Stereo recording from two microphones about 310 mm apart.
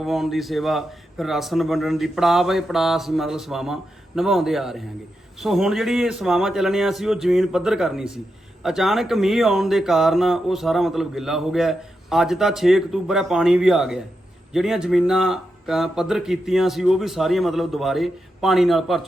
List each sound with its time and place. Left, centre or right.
0.0 s speech: centre